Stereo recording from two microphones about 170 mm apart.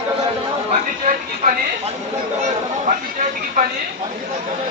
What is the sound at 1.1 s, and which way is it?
Speech, 55° right (ahead or behind).